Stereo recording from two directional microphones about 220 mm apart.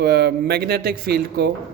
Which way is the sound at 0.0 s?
50° right (ahead or behind).